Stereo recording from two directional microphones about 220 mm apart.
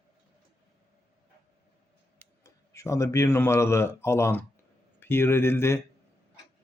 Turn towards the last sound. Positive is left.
turn(degrees=10)  # may be behind; listen again after turning